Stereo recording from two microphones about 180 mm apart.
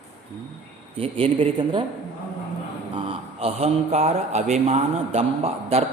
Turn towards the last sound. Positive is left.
turn(degrees=-35)  # may be behind; listen again after turning